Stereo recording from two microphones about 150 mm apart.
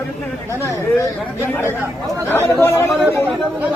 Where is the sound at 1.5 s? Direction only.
15° left (ahead or behind).